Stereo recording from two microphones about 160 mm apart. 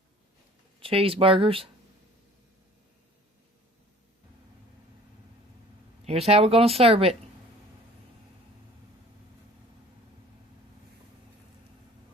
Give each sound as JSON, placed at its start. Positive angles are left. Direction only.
{"t": 0.8, "sound": "speech", "side_deg": -35}
{"t": 6.1, "sound": "speech", "side_deg": -40}